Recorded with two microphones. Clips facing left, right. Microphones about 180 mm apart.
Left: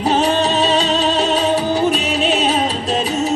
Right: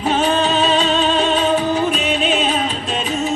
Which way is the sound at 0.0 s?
35° left (ahead or behind).